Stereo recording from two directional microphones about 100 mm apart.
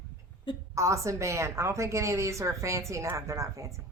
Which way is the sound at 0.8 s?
30° right (ahead or behind).